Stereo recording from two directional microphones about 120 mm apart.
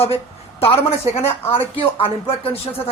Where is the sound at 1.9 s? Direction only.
55° left (ahead or behind).